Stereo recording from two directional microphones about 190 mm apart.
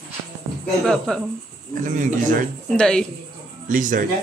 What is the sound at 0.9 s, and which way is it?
Speech, 5° left (ahead or behind).